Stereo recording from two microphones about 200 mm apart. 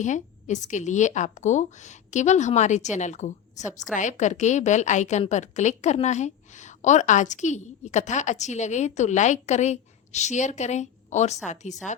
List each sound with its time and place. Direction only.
0.0 s a woman's voice: 35° left (ahead or behind)